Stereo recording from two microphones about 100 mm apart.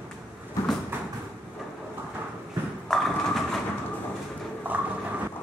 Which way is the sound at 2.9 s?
5° left (ahead or behind).